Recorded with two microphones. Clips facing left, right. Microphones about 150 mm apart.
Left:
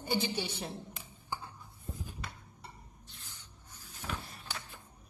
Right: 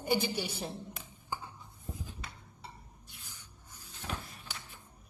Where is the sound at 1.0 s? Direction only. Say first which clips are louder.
Right 1 dB; 15° right (ahead or behind).